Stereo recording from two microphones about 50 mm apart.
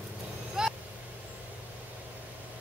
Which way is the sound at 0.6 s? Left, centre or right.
Centre.